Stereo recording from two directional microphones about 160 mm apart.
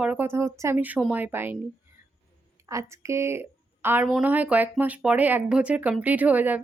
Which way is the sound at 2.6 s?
20° right (ahead or behind).